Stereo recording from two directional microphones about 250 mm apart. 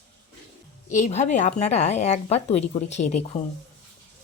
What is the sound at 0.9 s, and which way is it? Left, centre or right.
Speech, left.